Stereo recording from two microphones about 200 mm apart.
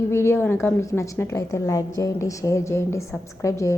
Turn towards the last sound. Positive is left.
turn(degrees=15)  # may be behind; listen again after turning